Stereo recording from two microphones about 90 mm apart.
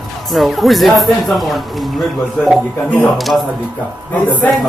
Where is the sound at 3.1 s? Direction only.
Centre (ahead or behind).